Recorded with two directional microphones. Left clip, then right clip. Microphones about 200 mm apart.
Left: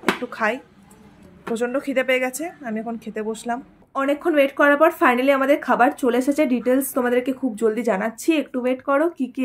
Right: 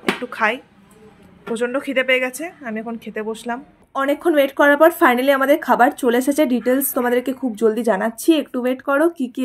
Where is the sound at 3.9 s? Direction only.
30° right (ahead or behind).